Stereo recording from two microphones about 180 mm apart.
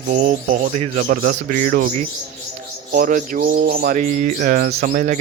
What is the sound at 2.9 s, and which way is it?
Bird, 50° right (ahead or behind).